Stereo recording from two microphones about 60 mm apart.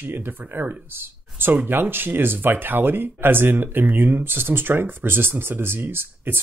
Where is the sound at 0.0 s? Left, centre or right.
Right.